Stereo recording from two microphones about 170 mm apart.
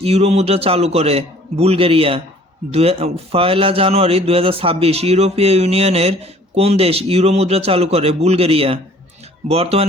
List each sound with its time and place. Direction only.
0.0 s a man's voice: 35° right (ahead or behind)